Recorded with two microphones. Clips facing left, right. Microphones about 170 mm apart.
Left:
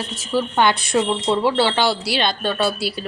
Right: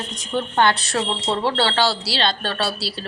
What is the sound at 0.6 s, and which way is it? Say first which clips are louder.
A woman's voice: left 1 dB; 15° left (ahead or behind).